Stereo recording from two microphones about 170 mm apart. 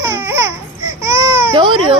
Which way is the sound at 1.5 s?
30° right (ahead or behind).